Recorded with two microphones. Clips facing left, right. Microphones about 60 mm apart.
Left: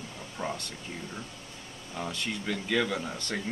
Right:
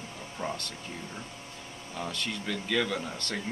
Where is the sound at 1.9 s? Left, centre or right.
Centre.